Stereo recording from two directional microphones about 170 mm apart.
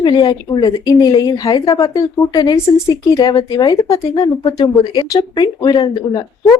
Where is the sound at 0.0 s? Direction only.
25° left (ahead or behind).